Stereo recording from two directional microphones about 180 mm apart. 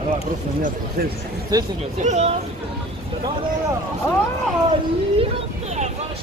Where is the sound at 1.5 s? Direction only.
20° right (ahead or behind).